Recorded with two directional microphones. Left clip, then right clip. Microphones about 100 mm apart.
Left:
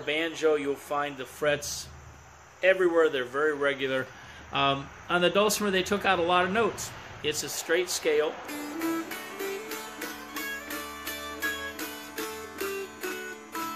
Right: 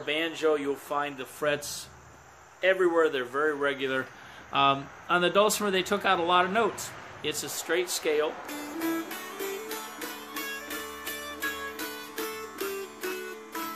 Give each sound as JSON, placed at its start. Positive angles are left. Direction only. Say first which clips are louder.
{"t": 0.0, "sound": "speech", "louder": "left 1 dB", "side_deg": -35}
{"t": 2.6, "sound": "speech", "louder": "left 1 dB", "side_deg": -30}
{"t": 9.7, "sound": "music", "louder": "even", "side_deg": 20}